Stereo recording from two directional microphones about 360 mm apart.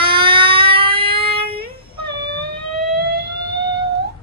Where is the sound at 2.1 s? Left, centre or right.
Right.